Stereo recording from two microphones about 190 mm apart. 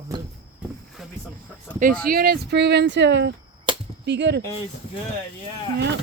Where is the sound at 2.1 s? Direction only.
55° right (ahead or behind).